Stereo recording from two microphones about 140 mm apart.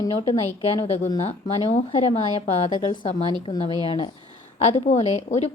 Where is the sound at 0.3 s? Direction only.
50° left (ahead or behind).